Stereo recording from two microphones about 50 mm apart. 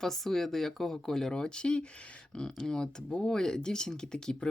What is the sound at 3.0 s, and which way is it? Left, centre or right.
Speech, left.